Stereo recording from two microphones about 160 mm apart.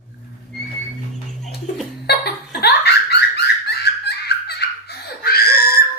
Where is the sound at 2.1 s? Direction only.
90° left.